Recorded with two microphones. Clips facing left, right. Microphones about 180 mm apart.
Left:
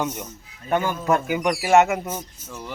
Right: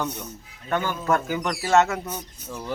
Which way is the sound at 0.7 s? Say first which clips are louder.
Left 2 dB; 10° left (ahead or behind).